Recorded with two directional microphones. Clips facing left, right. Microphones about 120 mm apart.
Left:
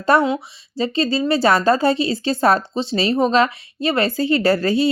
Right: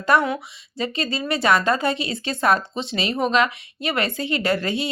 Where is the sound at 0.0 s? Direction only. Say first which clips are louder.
Left 3 dB; 30° left (ahead or behind).